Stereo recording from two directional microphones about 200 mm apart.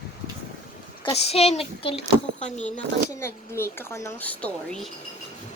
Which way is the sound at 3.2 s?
15° left (ahead or behind).